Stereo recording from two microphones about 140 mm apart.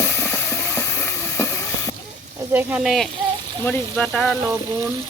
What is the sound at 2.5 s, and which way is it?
Speech, 15° right (ahead or behind).